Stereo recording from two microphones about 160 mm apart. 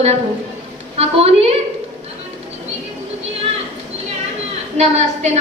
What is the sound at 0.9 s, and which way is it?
Speech, 40° right (ahead or behind).